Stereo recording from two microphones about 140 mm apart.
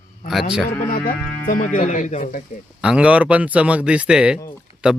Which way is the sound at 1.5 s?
65° left (ahead or behind).